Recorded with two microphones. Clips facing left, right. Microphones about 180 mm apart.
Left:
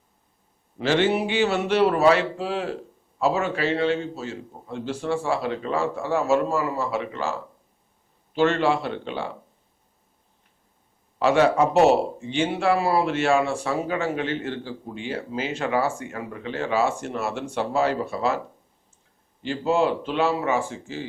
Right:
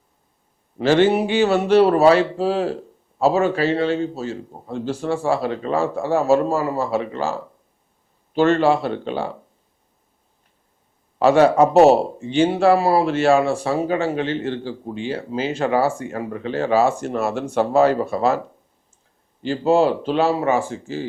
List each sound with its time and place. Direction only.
0.8 s speech: 40° right (ahead or behind)
8.4 s speech: 40° right (ahead or behind)
11.2 s speech: 40° right (ahead or behind)
19.4 s speech: 35° right (ahead or behind)